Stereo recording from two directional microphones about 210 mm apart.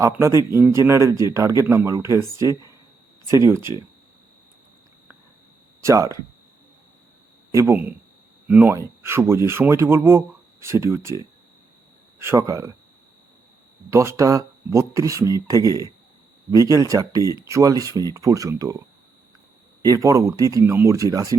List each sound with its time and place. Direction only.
0.0 s speech: 15° right (ahead or behind)
5.8 s speech: 15° right (ahead or behind)
7.5 s speech: 10° right (ahead or behind)
12.2 s speech: 15° right (ahead or behind)
13.9 s speech: 15° right (ahead or behind)